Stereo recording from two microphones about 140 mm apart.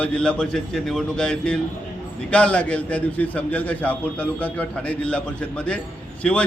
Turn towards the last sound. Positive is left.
turn(degrees=10)  # may be behind; listen again after turning